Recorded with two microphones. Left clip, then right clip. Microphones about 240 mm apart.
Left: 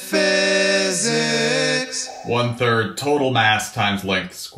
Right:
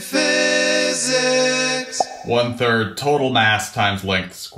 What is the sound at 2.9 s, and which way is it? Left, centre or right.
Speech, right.